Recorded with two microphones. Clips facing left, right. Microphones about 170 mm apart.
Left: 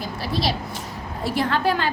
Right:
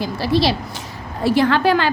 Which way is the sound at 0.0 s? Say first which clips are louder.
Right 7 dB; 85° right.